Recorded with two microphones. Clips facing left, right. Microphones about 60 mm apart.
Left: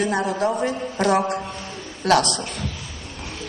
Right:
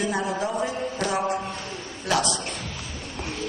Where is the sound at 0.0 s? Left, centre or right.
Left.